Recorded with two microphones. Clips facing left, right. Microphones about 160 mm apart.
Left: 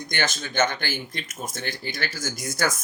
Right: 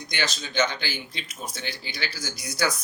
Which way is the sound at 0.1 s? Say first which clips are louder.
Left 2 dB; 50° left (ahead or behind).